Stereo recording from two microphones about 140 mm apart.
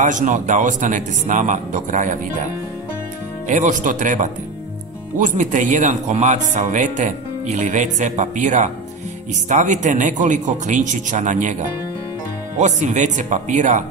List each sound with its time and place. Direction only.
0.0 s speech: 65° right (ahead or behind)
3.4 s speech: 65° right (ahead or behind)
12.5 s speech: 55° right (ahead or behind)